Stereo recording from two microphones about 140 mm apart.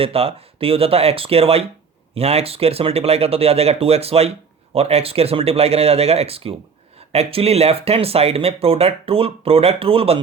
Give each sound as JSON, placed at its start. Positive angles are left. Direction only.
{"t": 0.0, "sound": "speech", "side_deg": -45}